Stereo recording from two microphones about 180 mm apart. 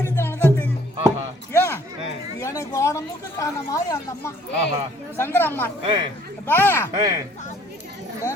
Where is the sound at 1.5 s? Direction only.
15° left (ahead or behind).